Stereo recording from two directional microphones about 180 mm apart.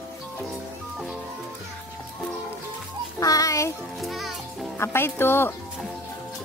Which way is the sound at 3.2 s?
20° left (ahead or behind).